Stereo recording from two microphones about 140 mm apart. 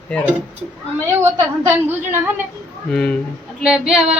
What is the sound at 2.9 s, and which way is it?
Speech, 5° left (ahead or behind).